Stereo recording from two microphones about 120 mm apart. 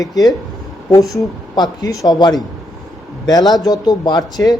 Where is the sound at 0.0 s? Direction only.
30° left (ahead or behind).